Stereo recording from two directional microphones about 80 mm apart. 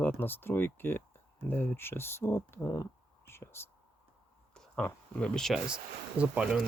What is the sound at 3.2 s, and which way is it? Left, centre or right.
Whispering, left.